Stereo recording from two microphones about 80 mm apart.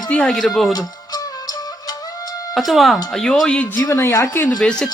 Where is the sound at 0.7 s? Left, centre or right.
Left.